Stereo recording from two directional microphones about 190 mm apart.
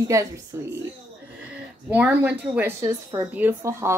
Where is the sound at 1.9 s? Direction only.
5° right (ahead or behind).